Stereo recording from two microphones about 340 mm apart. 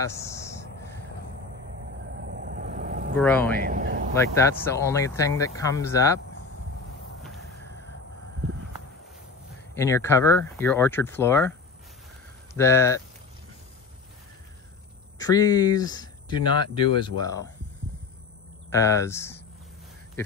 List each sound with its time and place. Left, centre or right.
0.0 s speech: centre
2.2 s vehicle: right
3.2 s speech: centre
3.6 s a sound: right
4.2 s speech: centre
9.8 s speech: centre
12.5 s speech: centre
15.1 s speech: centre
18.7 s speech: centre